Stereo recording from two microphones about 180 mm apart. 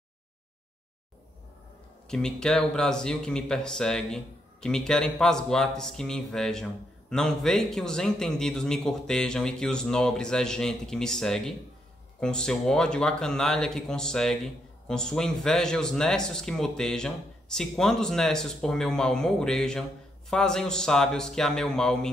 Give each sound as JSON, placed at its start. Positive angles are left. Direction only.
{"t": 2.0, "sound": "speech", "side_deg": 5}